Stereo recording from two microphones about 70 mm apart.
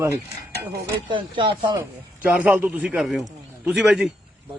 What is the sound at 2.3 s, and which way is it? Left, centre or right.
Speech, right.